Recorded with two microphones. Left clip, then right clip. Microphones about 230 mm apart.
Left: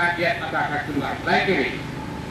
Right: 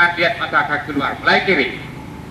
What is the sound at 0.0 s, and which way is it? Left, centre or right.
Speech, centre.